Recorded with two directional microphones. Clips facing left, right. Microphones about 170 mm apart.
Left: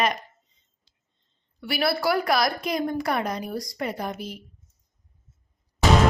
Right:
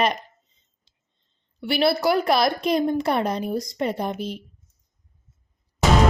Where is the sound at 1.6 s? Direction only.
25° right (ahead or behind).